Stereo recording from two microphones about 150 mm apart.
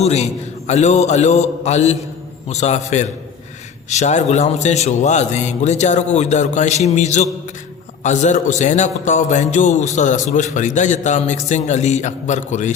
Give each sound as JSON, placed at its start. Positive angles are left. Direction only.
{"t": 0.0, "sound": "a man's voice", "side_deg": 45}